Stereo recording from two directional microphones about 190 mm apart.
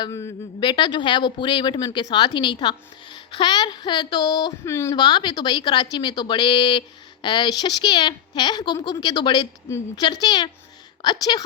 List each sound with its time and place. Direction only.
0.0 s speech: 15° left (ahead or behind)